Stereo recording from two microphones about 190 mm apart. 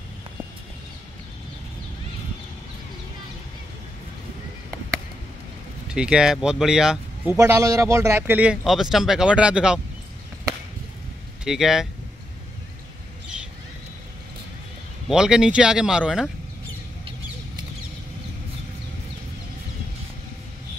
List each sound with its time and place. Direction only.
5.9 s speech: 5° right (ahead or behind)
7.3 s speech: 15° right (ahead or behind)
11.4 s speech: centre (ahead or behind)
15.0 s speech: 5° right (ahead or behind)